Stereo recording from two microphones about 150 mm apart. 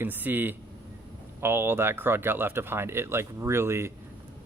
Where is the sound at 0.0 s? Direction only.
15° right (ahead or behind).